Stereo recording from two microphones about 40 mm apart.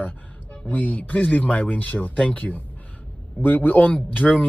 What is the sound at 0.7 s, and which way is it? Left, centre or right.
Speech, left.